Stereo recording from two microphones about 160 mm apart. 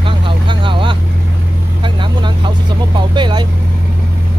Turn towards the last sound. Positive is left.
turn(degrees=-30)  # may be behind; listen again after turning